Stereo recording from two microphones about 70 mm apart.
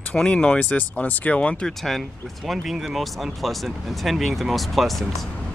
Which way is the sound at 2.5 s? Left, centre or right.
Centre.